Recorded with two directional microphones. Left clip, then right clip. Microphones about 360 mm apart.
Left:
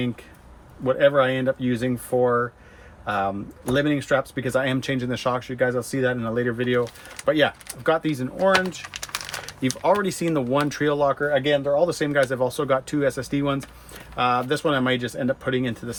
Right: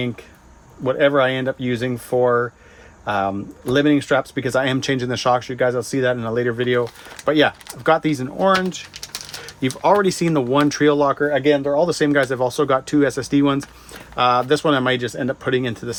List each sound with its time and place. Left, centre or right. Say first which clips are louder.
0.9 s speech: right 2 dB; right
8.9 s typing: left 1 dB; centre
9.6 s speech: right 5 dB; right